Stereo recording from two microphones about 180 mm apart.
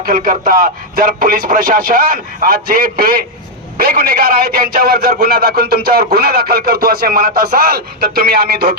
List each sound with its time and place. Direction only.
0.0 s a man's voice: 55° right (ahead or behind)